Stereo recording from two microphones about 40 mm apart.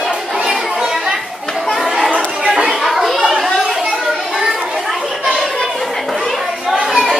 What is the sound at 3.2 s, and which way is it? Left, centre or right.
Chatter, centre.